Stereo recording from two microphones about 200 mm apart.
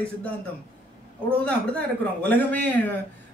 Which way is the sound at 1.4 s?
5° left (ahead or behind).